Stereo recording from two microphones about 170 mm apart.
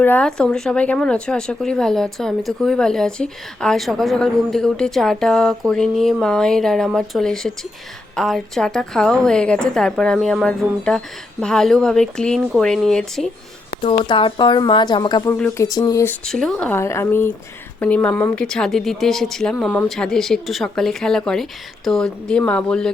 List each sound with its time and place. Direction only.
0.0 s speech: 10° left (ahead or behind)
13.8 s speech: 30° left (ahead or behind)
15.3 s speech: 15° left (ahead or behind)
16.2 s speech: 5° left (ahead or behind)